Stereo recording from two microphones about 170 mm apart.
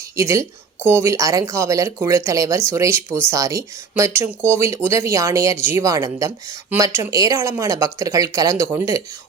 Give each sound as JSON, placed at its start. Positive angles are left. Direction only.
{"t": 0.2, "sound": "speech", "side_deg": -15}